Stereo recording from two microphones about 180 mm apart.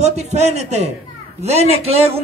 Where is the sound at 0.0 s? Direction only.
40° right (ahead or behind).